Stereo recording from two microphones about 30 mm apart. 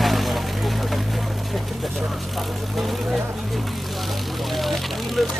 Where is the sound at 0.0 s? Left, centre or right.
Centre.